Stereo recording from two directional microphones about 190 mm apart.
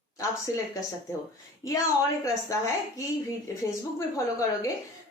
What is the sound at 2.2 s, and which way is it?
Speech, 15° left (ahead or behind).